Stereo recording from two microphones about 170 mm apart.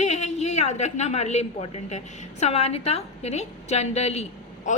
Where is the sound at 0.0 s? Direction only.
45° left (ahead or behind).